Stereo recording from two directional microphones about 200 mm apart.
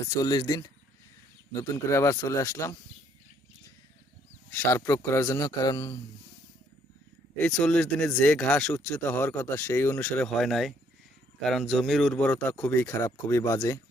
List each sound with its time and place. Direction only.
0.2 s speech: 20° left (ahead or behind)
4.5 s speech: 10° left (ahead or behind)
7.3 s speech: 5° left (ahead or behind)